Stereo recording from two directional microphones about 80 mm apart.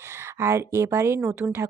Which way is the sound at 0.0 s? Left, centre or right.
Right.